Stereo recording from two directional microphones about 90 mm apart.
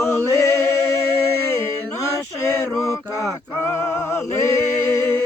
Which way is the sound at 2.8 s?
35° left (ahead or behind).